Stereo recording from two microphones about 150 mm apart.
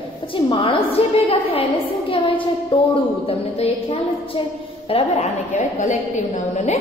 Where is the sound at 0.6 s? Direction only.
40° left (ahead or behind).